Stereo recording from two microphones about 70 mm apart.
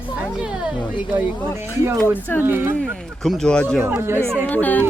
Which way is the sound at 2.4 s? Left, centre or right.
Right.